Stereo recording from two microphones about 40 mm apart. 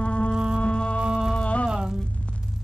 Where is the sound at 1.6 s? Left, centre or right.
Centre.